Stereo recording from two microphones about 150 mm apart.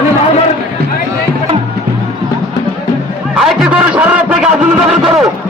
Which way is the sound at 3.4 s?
5° right (ahead or behind).